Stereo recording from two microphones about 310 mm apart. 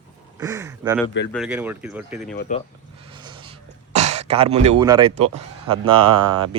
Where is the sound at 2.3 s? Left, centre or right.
Left.